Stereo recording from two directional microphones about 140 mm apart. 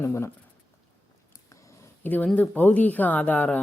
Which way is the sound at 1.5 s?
20° left (ahead or behind).